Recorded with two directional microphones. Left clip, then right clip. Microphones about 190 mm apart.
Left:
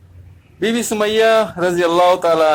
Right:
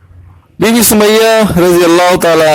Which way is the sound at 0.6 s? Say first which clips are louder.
Right 10 dB; 50° right (ahead or behind).